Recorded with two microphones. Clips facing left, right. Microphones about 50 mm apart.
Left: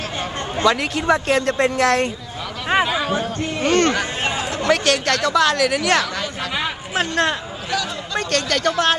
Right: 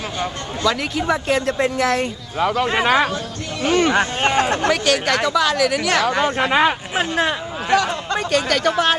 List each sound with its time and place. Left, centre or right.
0.7 s speech: centre
3.6 s speech: centre
3.9 s speech: right
4.8 s speech: centre
6.2 s speech: right
7.0 s speech: centre
7.7 s speech: right
8.3 s speech: centre